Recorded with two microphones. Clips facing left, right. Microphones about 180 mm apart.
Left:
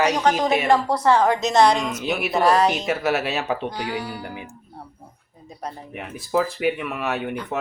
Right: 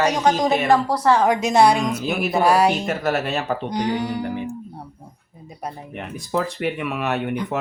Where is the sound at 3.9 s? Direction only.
20° right (ahead or behind).